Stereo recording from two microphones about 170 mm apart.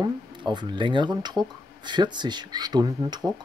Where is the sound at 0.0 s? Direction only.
25° right (ahead or behind).